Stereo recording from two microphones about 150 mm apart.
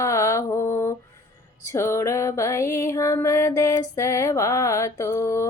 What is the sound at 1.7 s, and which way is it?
Music, 20° left (ahead or behind).